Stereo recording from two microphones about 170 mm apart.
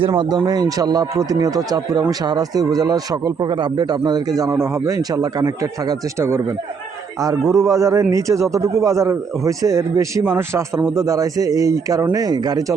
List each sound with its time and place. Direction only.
0.1 s speech: 25° right (ahead or behind)
7.5 s speech: 20° right (ahead or behind)